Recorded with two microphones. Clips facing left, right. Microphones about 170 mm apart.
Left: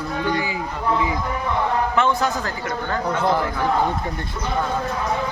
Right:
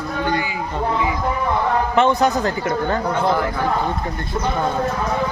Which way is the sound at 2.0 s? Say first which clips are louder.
Right 7 dB; 20° right (ahead or behind).